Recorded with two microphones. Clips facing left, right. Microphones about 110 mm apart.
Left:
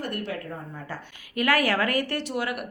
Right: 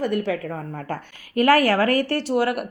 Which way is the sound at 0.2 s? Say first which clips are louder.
Right 7 dB; 75° right (ahead or behind).